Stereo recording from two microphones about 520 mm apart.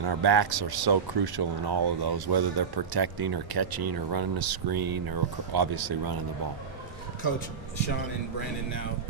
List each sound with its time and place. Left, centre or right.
0.0 s speech: right